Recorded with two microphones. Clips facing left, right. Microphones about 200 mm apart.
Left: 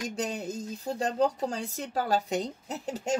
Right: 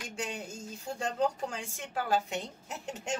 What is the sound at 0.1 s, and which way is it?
Speech, 40° left (ahead or behind).